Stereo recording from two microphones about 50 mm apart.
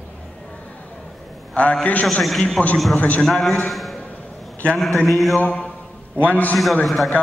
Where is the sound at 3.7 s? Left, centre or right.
Centre.